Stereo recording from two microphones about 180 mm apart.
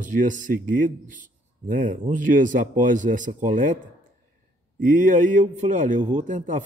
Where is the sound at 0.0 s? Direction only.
45° right (ahead or behind).